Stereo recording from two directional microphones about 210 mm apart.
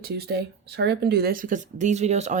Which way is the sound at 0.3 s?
50° right (ahead or behind).